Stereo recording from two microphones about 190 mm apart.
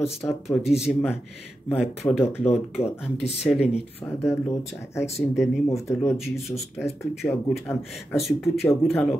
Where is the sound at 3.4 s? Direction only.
Centre (ahead or behind).